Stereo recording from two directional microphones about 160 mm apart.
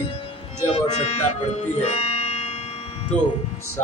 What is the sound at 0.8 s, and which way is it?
Music, 40° left (ahead or behind).